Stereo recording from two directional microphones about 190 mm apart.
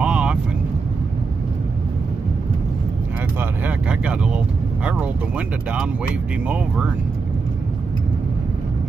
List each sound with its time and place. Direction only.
0.0 s vehicle: 5° right (ahead or behind)
3.3 s vehicle: 10° right (ahead or behind)
6.4 s speech: 5° right (ahead or behind)